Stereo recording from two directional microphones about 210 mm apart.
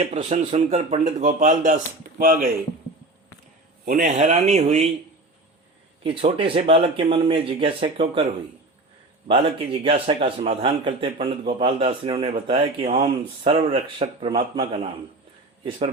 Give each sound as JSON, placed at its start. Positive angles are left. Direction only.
{"t": 0.0, "sound": "speech", "side_deg": -35}
{"t": 3.8, "sound": "speech", "side_deg": -35}
{"t": 6.0, "sound": "a man's voice", "side_deg": -25}
{"t": 9.8, "sound": "a man's voice", "side_deg": -25}